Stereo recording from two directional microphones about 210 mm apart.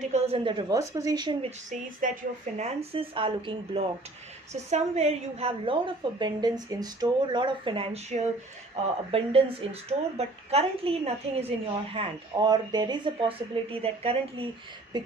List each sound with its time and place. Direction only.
0.1 s a woman's voice: 25° right (ahead or behind)